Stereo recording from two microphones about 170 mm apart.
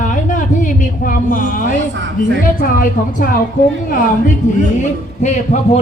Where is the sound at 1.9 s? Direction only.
90° right.